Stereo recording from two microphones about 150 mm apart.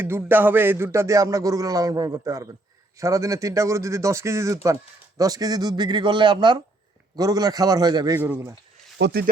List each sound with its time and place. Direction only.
0.0 s speech: 15° right (ahead or behind)
8.2 s speech: 15° right (ahead or behind)